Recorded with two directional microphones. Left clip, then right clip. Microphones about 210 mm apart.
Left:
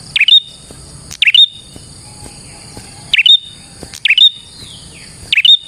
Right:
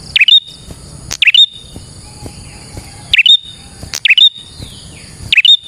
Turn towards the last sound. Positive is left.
turn(degrees=-20)  # may be behind; listen again after turning